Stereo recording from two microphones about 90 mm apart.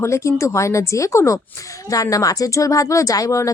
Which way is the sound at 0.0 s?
35° left (ahead or behind).